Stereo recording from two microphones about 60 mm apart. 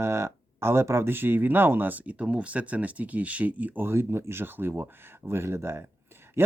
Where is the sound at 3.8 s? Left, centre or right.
Right.